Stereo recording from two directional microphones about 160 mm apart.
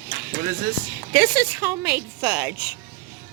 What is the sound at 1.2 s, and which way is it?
Speech, 10° right (ahead or behind).